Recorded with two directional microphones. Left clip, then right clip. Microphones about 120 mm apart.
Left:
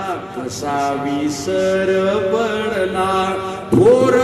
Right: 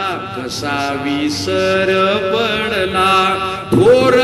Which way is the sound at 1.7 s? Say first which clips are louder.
Right 4 dB; 45° right (ahead or behind).